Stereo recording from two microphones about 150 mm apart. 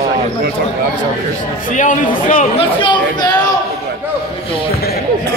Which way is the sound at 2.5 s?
30° left (ahead or behind).